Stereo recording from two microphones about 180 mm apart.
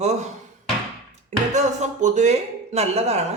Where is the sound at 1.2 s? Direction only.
40° right (ahead or behind).